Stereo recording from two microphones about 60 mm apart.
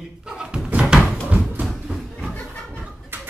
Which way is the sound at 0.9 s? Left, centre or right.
Centre.